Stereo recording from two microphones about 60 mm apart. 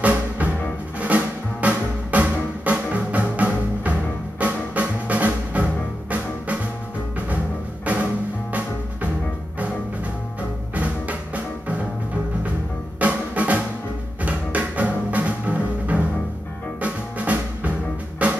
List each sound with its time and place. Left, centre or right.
0.0 s music: right
7.8 s music: right
10.7 s music: right
13.0 s drum: right
14.2 s music: right